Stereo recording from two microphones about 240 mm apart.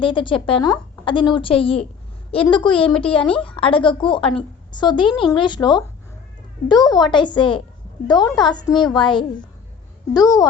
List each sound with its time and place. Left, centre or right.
0.0 s a woman's voice: left